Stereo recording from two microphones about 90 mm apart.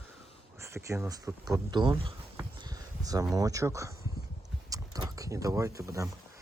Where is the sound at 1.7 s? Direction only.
60° right (ahead or behind).